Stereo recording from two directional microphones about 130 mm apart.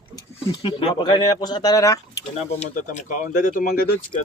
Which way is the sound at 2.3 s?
70° left (ahead or behind).